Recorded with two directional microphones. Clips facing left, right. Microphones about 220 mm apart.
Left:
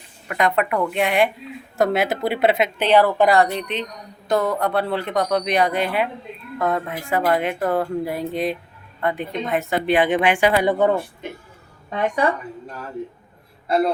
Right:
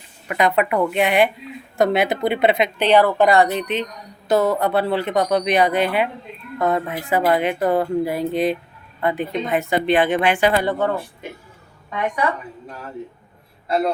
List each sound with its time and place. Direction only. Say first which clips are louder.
0.3 s a woman's voice: right 2 dB; centre (ahead or behind); by 10.9 s 15° left (ahead or behind)
11.9 s speech: left 2 dB; 30° left (ahead or behind)